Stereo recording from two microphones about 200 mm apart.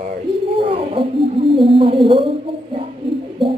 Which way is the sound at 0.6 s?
25° right (ahead or behind).